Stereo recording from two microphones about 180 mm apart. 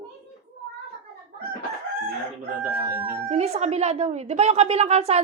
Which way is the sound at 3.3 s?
40° right (ahead or behind).